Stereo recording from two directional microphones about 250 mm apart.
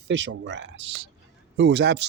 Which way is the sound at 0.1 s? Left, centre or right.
Right.